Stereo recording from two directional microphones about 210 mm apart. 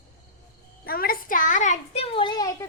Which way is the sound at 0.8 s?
45° left (ahead or behind).